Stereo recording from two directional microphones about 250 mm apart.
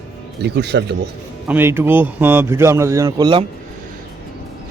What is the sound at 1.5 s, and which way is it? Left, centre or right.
Speech, centre.